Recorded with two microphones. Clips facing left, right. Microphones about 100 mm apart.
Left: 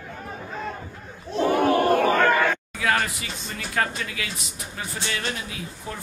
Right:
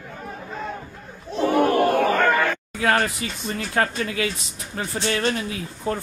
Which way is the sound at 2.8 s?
35° right (ahead or behind).